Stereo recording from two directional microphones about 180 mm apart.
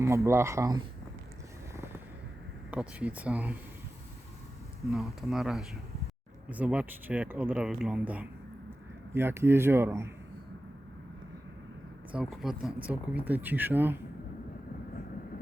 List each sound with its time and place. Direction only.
0.3 s speech: 15° right (ahead or behind)
2.6 s speech: 5° right (ahead or behind)
4.8 s speech: centre (ahead or behind)
12.1 s speech: centre (ahead or behind)